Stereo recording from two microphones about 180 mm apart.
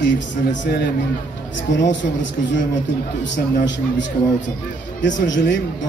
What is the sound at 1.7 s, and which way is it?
Speech, 80° left.